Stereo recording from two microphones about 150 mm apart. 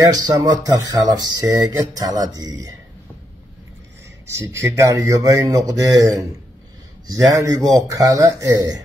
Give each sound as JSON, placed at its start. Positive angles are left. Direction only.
{"t": 0.0, "sound": "speech", "side_deg": -25}
{"t": 4.5, "sound": "speech", "side_deg": -20}